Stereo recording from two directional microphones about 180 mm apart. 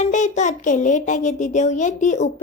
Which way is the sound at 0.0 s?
40° left (ahead or behind).